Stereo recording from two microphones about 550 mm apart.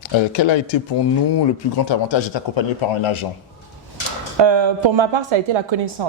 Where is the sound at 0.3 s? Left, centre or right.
Left.